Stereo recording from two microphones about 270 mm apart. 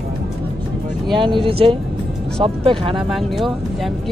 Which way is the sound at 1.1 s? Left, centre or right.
Centre.